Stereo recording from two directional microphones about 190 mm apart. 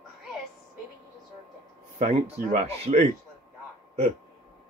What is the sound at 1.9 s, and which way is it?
Speech, 40° right (ahead or behind).